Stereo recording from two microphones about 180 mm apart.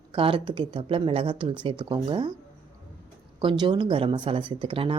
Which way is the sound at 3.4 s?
25° right (ahead or behind).